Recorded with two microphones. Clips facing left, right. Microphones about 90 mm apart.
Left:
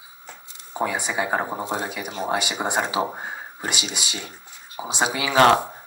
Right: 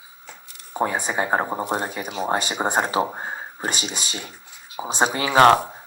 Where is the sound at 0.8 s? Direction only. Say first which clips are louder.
Right 2 dB; 40° right (ahead or behind).